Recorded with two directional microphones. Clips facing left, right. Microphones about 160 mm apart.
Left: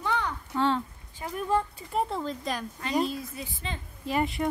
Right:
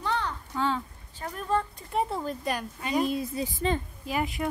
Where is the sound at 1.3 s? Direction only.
10° left (ahead or behind).